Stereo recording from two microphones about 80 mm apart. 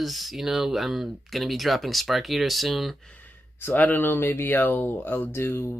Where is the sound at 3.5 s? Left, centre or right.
Left.